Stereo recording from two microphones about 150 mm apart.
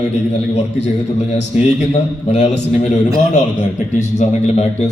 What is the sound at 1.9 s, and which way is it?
A man's voice, 50° left (ahead or behind).